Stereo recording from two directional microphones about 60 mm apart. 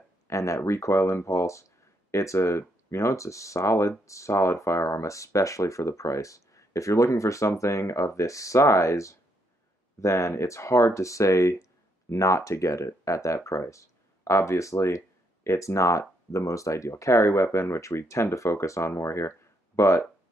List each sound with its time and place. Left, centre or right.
0.3 s speech: left